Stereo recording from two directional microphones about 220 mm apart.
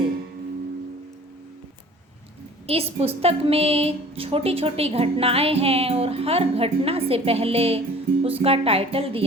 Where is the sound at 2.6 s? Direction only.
25° right (ahead or behind).